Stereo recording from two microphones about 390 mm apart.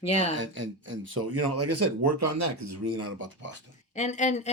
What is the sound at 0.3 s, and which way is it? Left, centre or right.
Speech, right.